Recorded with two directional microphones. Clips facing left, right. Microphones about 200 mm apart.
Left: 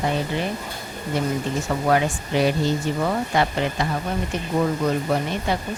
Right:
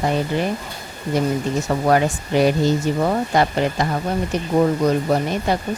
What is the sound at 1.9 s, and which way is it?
Speech, 45° right (ahead or behind).